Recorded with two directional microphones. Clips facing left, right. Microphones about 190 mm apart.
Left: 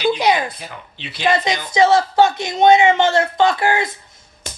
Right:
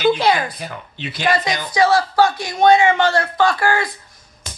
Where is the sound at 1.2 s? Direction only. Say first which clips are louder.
Left 1 dB; 25° left (ahead or behind).